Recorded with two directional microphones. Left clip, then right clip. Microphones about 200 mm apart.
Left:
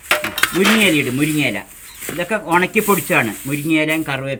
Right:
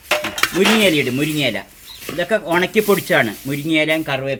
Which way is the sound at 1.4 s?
20° left (ahead or behind).